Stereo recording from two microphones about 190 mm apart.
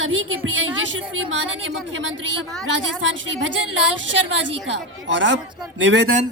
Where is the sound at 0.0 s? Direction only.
90° right; by 3.2 s 75° right (ahead or behind).